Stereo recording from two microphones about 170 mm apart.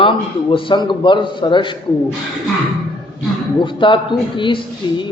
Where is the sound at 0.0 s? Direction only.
30° left (ahead or behind).